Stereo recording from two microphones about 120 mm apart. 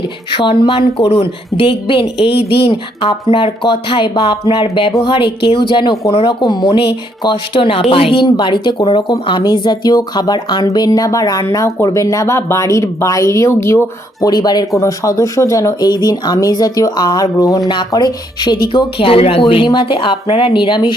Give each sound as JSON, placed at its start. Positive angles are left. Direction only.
{"t": 0.3, "sound": "a woman's voice", "side_deg": 45}
{"t": 6.1, "sound": "speech", "side_deg": 55}
{"t": 6.4, "sound": "a woman's voice", "side_deg": 40}